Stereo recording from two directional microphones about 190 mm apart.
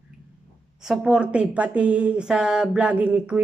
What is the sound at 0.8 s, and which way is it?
A woman's voice, 5° right (ahead or behind).